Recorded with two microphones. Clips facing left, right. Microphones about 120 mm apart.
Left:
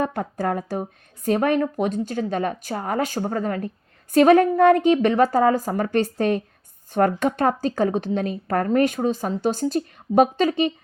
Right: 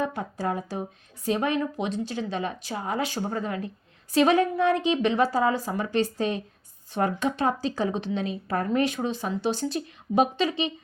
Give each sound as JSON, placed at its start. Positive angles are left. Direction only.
{"t": 0.0, "sound": "a woman's voice", "side_deg": 55}